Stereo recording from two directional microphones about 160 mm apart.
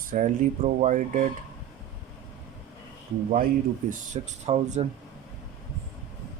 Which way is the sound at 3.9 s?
50° right (ahead or behind).